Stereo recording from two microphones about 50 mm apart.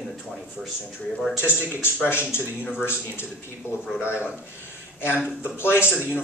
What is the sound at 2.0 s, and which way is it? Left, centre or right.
A man's voice, left.